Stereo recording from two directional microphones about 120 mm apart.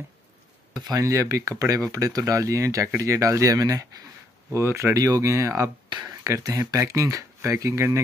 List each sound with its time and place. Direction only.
0.7 s speech: 30° right (ahead or behind)